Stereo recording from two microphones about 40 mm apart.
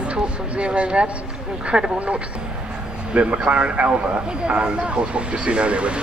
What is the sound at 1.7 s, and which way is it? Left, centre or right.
Speech, right.